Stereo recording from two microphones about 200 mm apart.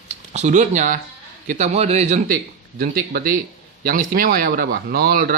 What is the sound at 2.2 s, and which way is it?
Speech, 45° right (ahead or behind).